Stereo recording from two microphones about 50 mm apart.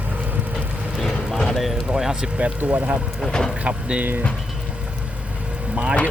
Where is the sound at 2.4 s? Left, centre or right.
Right.